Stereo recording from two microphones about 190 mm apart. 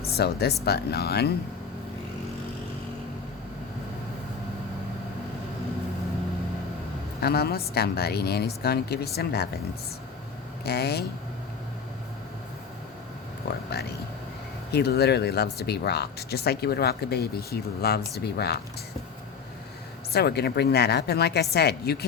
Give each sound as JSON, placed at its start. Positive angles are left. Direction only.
{"t": 0.1, "sound": "speech", "side_deg": 60}
{"t": 7.2, "sound": "speech", "side_deg": 55}
{"t": 10.7, "sound": "speech", "side_deg": 60}
{"t": 14.7, "sound": "speech", "side_deg": 60}
{"t": 20.1, "sound": "speech", "side_deg": 60}